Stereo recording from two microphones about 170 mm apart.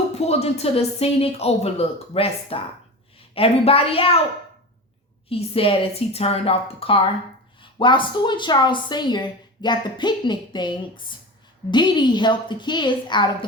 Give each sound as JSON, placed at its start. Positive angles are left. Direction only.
{"t": 0.1, "sound": "speech", "side_deg": 40}
{"t": 5.3, "sound": "a woman's voice", "side_deg": 35}